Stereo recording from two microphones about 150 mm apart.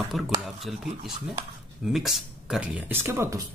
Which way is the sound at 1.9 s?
Centre (ahead or behind).